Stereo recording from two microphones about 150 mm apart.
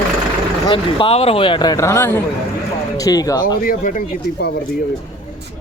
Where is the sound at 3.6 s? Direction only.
70° left (ahead or behind).